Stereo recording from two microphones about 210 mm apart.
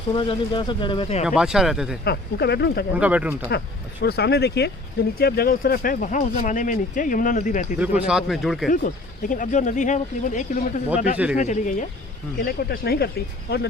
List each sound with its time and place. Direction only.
0.1 s speech: 25° left (ahead or behind)
1.2 s speech: 5° right (ahead or behind)
2.0 s speech: 50° left (ahead or behind)
2.9 s speech: 5° right (ahead or behind)
4.0 s speech: 50° left (ahead or behind)
7.8 s speech: 5° right (ahead or behind)
9.3 s speech: 35° left (ahead or behind)
12.5 s speech: 45° left (ahead or behind)